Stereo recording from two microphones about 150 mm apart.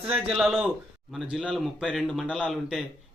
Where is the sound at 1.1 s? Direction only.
5° right (ahead or behind).